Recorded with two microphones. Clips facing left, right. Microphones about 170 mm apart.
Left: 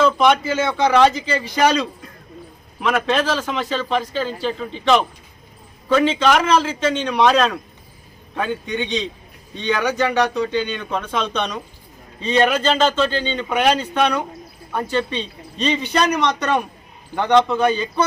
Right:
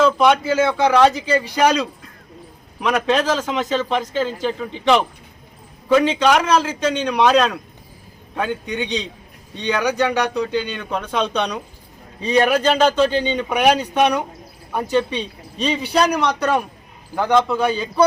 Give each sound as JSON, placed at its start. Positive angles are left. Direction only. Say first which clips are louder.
{"t": 0.0, "sound": "a man's voice", "louder": "right 1 dB", "side_deg": -10}
{"t": 3.1, "sound": "a man's voice", "louder": "right 1 dB", "side_deg": -15}
{"t": 9.8, "sound": "a man's voice", "louder": "even", "side_deg": 0}